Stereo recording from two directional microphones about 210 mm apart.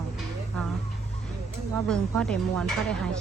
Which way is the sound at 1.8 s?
5° left (ahead or behind).